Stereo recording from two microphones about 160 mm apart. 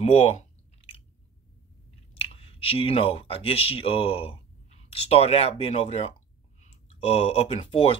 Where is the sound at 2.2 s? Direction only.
35° left (ahead or behind).